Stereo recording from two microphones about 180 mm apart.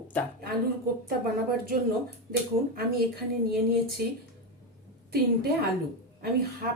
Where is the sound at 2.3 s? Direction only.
60° right (ahead or behind).